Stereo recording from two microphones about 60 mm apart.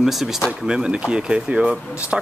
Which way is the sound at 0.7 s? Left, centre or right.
Centre.